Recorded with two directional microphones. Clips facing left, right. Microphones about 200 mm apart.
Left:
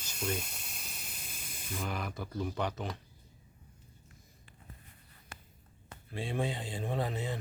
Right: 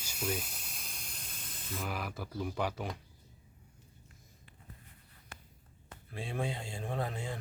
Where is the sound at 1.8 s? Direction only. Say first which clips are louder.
Left 1 dB; 5° right (ahead or behind).